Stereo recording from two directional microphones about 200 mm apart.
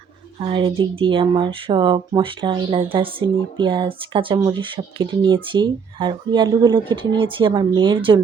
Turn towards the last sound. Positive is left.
turn(degrees=-25)  # may be behind; listen again after turning